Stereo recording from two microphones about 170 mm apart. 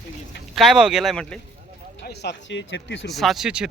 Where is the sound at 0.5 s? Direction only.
Centre (ahead or behind).